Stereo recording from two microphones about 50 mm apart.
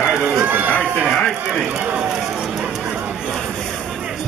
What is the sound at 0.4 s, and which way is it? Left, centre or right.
Run, right.